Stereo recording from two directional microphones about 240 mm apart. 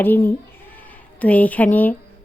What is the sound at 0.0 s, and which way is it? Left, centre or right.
A woman's voice, centre.